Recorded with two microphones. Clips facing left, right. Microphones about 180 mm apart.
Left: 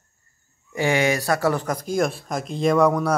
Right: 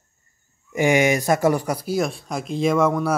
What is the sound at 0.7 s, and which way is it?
Speech, 15° right (ahead or behind).